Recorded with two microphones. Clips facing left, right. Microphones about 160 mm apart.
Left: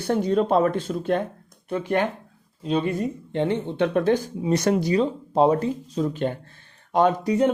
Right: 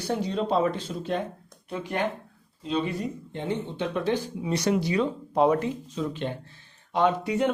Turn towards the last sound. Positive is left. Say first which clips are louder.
# left 4 dB
turn(degrees=40)  # may be behind; listen again after turning